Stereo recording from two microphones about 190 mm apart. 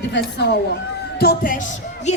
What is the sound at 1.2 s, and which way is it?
Music, 50° left (ahead or behind).